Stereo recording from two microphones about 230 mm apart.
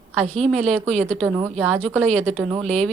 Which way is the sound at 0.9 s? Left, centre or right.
Right.